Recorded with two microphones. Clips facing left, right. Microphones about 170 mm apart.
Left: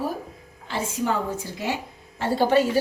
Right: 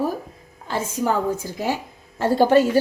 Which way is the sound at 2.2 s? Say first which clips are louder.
Right 4 dB; 45° right (ahead or behind).